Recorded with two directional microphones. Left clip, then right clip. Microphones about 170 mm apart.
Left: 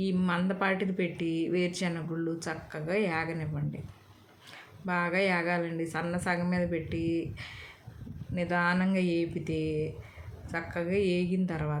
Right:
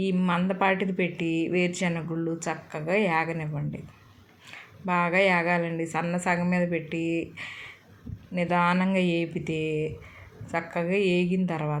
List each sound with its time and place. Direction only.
0.0 s speech: 15° right (ahead or behind)
4.9 s speech: 15° right (ahead or behind)